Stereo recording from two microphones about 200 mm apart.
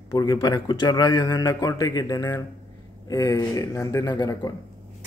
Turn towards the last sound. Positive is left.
turn(degrees=20)  # may be behind; listen again after turning